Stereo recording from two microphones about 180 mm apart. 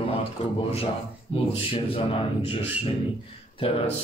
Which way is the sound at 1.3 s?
30° left (ahead or behind).